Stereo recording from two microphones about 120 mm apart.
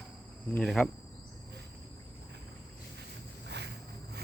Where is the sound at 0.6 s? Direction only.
5° left (ahead or behind).